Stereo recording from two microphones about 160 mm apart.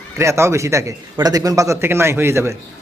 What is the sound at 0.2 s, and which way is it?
A man's voice, 15° right (ahead or behind).